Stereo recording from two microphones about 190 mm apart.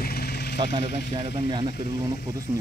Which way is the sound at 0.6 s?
35° right (ahead or behind).